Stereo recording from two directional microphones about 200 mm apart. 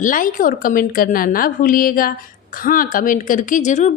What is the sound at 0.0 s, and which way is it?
A woman's voice, 40° left (ahead or behind).